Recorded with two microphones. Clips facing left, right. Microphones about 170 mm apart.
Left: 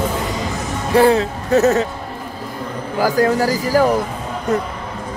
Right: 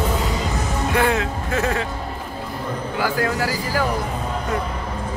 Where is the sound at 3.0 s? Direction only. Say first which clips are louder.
Left 7 dB; 40° left (ahead or behind).